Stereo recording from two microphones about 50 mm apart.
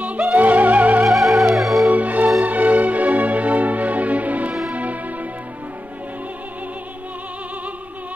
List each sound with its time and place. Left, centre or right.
0.0 s music: right
1.0 s music: centre
1.9 s music: right